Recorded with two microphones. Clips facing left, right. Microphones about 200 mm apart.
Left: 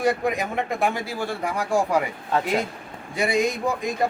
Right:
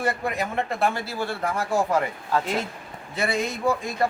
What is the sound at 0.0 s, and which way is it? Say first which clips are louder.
A man's voice: left 4 dB; 15° left (ahead or behind).